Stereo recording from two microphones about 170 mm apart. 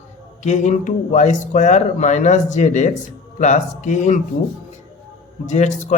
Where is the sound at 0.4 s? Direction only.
45° left (ahead or behind).